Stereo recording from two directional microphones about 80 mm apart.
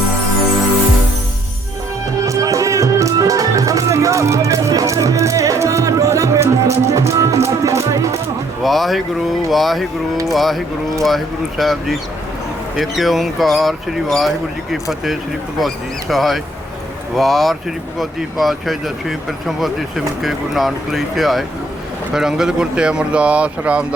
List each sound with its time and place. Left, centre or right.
2.2 s music: right
8.6 s speech: centre